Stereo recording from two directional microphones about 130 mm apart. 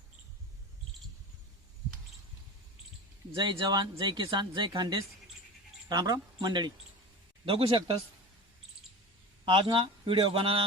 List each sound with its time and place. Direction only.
3.3 s speech: 35° right (ahead or behind)
9.5 s speech: 40° right (ahead or behind)